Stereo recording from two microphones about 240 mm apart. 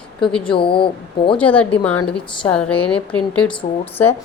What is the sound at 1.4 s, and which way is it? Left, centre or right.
A woman's voice, centre.